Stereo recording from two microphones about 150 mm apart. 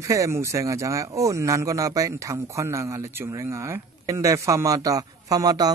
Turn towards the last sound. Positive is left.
turn(degrees=-25)  # may be behind; listen again after turning